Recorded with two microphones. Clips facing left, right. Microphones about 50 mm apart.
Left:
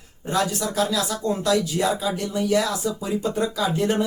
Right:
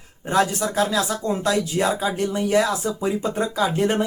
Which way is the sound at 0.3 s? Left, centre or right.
Right.